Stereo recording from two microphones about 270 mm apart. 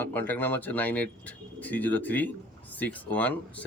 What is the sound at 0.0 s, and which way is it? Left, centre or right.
Speech, centre.